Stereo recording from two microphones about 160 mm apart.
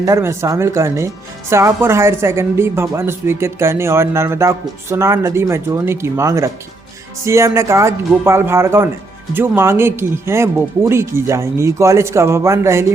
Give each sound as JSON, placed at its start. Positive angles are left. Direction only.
{"t": 0.0, "sound": "speech", "side_deg": -20}